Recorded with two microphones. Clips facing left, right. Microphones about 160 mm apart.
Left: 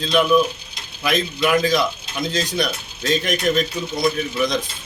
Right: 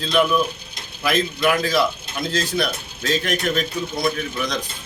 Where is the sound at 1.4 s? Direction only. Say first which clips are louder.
Left 2 dB; centre (ahead or behind).